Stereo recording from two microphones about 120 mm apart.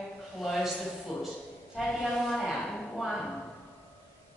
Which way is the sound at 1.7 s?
Centre (ahead or behind).